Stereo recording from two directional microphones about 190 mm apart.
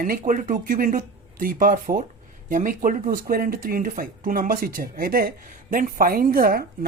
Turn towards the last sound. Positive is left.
turn(degrees=-50)  # may be behind; listen again after turning